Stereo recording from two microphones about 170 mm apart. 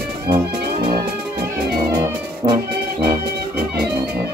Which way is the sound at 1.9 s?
25° right (ahead or behind).